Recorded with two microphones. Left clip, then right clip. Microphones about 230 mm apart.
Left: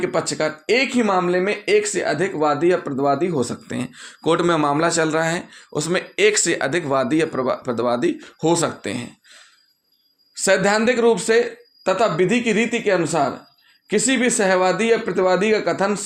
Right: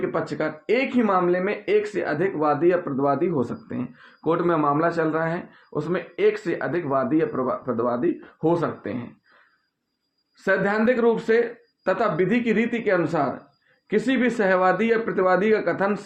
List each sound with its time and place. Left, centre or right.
0.0 s speech: left
10.4 s speech: left